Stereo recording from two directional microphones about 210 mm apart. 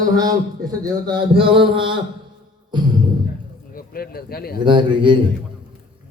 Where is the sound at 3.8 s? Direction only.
45° left (ahead or behind).